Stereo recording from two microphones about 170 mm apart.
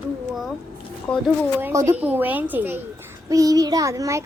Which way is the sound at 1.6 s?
20° right (ahead or behind).